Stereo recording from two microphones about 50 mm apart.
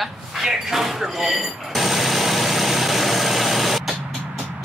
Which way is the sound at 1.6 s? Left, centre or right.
Centre.